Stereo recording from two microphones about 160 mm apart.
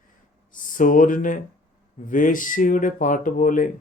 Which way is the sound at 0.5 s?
55° left (ahead or behind).